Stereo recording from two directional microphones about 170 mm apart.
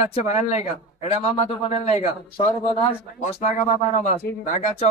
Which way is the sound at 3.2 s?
45° left (ahead or behind).